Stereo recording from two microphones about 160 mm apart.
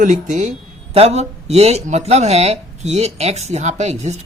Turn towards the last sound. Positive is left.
turn(degrees=-45)  # may be behind; listen again after turning